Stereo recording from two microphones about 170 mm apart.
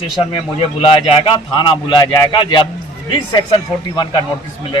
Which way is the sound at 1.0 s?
30° left (ahead or behind).